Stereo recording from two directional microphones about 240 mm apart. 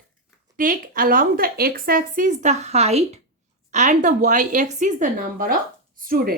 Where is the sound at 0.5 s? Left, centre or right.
Right.